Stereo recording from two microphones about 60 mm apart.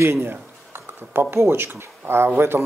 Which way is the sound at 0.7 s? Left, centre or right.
Right.